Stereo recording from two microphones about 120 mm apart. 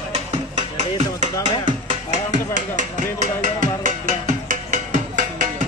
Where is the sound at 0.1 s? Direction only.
80° right.